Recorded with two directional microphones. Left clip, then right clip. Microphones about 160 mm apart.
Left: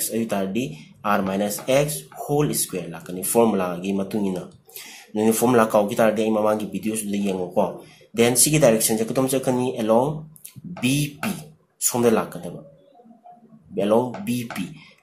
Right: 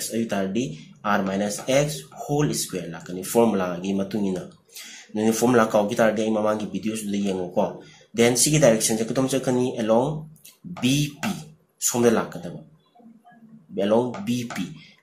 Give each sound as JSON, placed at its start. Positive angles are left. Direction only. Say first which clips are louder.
{"t": 0.1, "sound": "speech", "louder": "left 1 dB", "side_deg": 15}
{"t": 13.7, "sound": "speech", "louder": "left 1 dB", "side_deg": 15}